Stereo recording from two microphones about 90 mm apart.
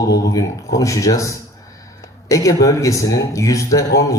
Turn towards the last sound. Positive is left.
turn(degrees=40)  # may be behind; listen again after turning